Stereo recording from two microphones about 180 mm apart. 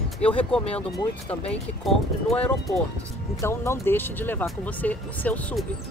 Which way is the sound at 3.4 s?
15° left (ahead or behind).